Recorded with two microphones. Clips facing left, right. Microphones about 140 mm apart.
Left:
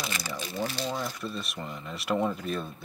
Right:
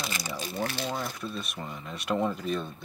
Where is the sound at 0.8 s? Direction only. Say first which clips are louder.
Left 1 dB; centre (ahead or behind).